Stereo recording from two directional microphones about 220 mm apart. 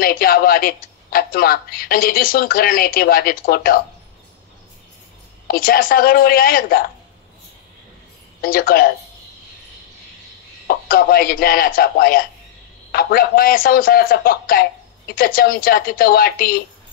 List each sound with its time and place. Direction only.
0.0 s a woman's voice: 40° left (ahead or behind)
5.5 s a woman's voice: 40° left (ahead or behind)
8.4 s a woman's voice: 40° left (ahead or behind)
10.7 s a woman's voice: 40° left (ahead or behind)